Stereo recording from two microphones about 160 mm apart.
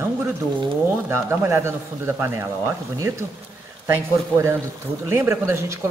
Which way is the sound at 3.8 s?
15° right (ahead or behind).